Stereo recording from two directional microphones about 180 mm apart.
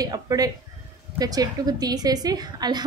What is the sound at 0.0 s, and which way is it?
A woman's voice, 20° right (ahead or behind).